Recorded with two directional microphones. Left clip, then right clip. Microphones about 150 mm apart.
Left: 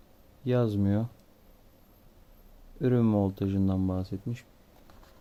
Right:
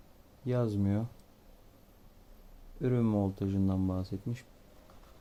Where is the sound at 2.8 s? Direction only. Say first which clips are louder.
Left 5 dB; 40° left (ahead or behind).